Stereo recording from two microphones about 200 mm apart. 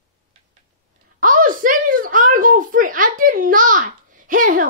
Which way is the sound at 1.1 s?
40° right (ahead or behind).